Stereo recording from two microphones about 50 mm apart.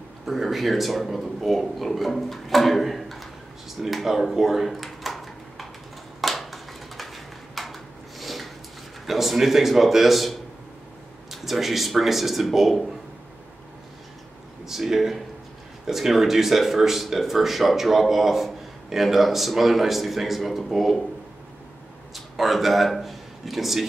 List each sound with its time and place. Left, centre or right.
0.2 s speech: centre
6.2 s a sound: centre
9.0 s speech: centre
14.7 s speech: centre
22.1 s a man's voice: centre